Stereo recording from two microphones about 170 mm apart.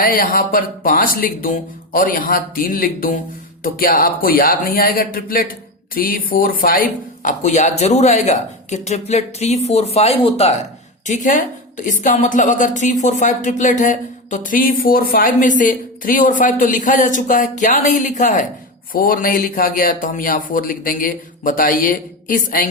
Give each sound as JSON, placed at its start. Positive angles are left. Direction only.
{"t": 0.0, "sound": "speech", "side_deg": 55}
{"t": 11.0, "sound": "a woman's voice", "side_deg": 45}